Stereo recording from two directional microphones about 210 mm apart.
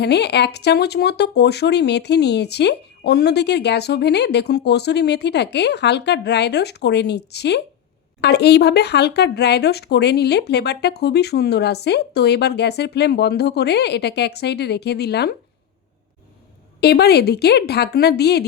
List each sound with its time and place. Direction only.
0.0 s speech: 50° left (ahead or behind)
16.8 s speech: 50° left (ahead or behind)